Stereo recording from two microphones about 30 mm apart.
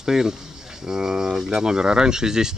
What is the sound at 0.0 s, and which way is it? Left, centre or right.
Speech, centre.